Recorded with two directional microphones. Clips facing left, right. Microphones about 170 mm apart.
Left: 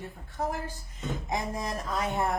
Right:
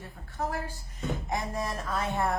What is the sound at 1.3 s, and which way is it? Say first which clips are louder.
Speech: left 2 dB; 20° left (ahead or behind).